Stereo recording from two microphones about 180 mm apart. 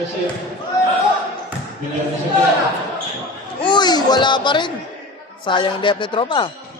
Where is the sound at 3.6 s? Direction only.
25° left (ahead or behind).